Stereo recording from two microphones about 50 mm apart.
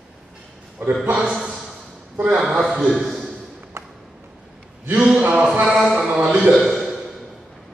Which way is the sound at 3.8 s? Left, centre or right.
Right.